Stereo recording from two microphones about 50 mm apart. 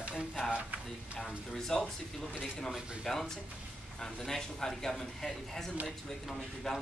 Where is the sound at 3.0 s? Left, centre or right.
Centre.